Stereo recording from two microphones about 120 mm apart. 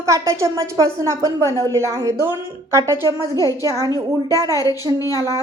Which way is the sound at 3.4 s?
30° left (ahead or behind).